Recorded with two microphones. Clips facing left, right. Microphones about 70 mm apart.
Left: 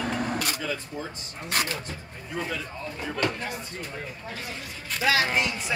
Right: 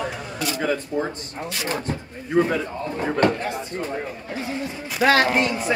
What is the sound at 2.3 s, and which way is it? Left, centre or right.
Speech, right.